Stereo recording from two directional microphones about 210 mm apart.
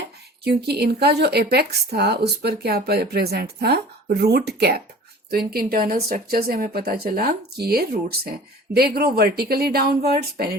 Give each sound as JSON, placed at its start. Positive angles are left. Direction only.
{"t": 0.4, "sound": "a woman's voice", "side_deg": -50}